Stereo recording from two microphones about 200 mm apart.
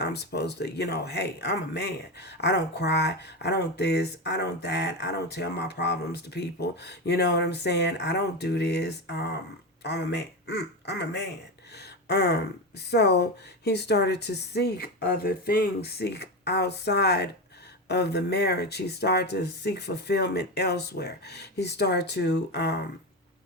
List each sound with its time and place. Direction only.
0.0 s speech: 55° left (ahead or behind)